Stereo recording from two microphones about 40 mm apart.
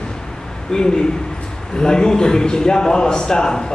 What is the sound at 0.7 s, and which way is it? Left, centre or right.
A man's voice, centre.